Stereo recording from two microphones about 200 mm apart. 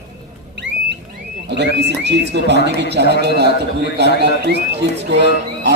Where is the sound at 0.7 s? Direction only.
65° right (ahead or behind).